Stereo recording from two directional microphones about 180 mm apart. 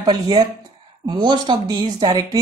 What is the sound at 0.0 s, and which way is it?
A woman's voice, 25° right (ahead or behind).